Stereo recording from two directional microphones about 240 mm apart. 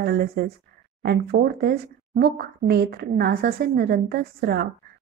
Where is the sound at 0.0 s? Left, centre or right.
Right.